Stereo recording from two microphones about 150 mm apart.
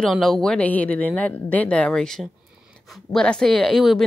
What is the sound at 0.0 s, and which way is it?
Speech, centre (ahead or behind).